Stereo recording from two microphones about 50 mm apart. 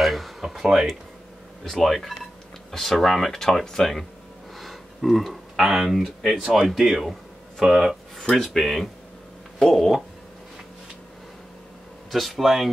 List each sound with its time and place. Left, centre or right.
0.0 s a sound: centre
1.6 s speech: centre
7.9 s speech: centre
12.1 s speech: centre